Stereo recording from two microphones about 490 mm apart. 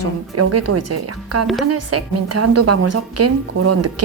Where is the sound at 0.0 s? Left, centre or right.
Right.